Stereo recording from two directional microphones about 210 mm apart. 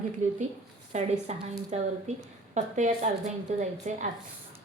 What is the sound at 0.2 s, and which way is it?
Speech, 35° right (ahead or behind).